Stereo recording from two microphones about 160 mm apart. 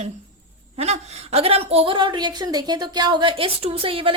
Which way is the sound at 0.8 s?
40° right (ahead or behind).